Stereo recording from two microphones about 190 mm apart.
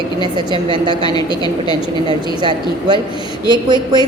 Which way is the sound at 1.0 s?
20° left (ahead or behind).